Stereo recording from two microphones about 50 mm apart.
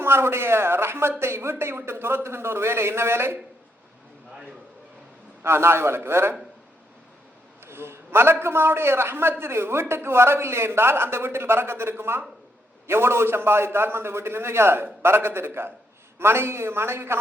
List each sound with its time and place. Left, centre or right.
0.0 s a man's voice: right
5.4 s a man's voice: right
7.6 s a man's voice: right